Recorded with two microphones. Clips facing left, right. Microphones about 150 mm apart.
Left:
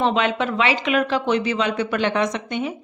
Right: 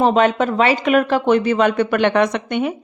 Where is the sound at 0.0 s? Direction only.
45° right (ahead or behind); by 2.7 s 60° right (ahead or behind).